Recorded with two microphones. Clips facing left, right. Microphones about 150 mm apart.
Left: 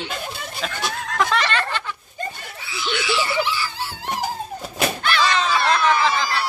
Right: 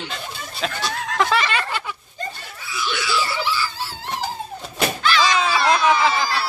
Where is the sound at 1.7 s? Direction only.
10° right (ahead or behind).